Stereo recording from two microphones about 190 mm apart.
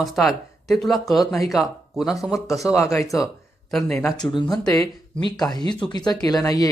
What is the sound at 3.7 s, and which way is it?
Speech, centre (ahead or behind).